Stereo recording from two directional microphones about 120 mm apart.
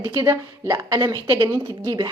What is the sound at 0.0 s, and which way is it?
A woman's voice, 20° right (ahead or behind).